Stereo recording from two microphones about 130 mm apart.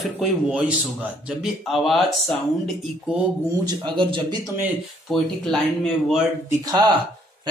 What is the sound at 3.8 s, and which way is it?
Speech, 35° right (ahead or behind).